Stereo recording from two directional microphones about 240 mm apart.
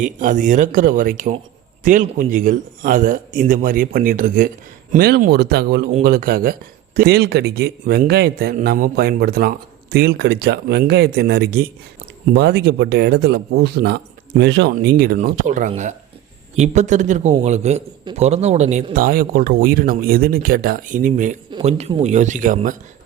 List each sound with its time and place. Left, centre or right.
0.0 s a man's voice: right